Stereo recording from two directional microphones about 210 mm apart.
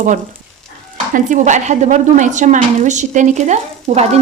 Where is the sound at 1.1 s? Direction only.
35° right (ahead or behind).